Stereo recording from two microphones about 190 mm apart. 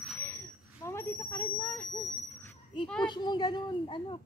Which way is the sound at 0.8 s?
15° left (ahead or behind).